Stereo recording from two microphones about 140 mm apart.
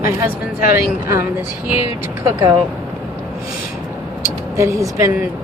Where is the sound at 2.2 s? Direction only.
25° right (ahead or behind).